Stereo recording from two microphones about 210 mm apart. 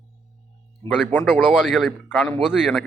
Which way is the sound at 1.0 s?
10° left (ahead or behind).